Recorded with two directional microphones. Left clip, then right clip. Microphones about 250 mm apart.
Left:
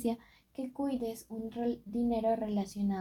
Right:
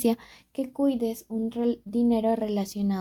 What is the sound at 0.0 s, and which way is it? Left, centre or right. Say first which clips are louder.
Speech: right 9 dB; right.